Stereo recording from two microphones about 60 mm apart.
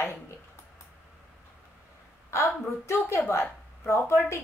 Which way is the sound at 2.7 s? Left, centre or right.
Left.